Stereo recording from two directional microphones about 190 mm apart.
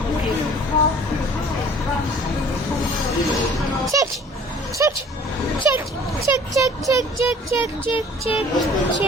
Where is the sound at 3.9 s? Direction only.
15° right (ahead or behind).